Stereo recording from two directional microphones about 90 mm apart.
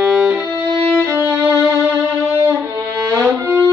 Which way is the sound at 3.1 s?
35° right (ahead or behind).